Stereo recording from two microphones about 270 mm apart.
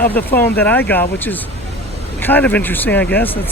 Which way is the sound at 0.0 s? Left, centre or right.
Centre.